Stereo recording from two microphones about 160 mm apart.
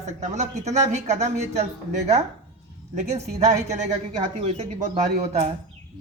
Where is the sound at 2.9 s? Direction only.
45° right (ahead or behind).